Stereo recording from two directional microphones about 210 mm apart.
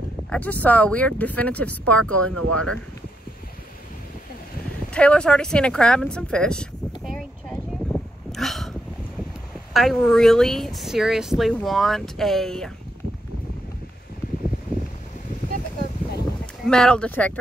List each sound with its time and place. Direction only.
0.3 s speech: 10° left (ahead or behind)
2.1 s speech: 90° right
2.5 s speech: 5° left (ahead or behind)
4.9 s speech: 5° left (ahead or behind)
8.3 s a sound: centre (ahead or behind)
9.8 s speech: centre (ahead or behind)
16.6 s speech: 5° left (ahead or behind)